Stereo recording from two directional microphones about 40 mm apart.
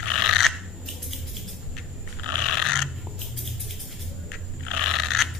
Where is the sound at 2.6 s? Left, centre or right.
Centre.